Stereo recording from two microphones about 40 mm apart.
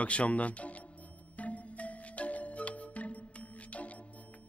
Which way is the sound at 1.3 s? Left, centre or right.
Left.